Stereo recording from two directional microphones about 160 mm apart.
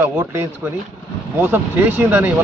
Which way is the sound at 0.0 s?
15° right (ahead or behind).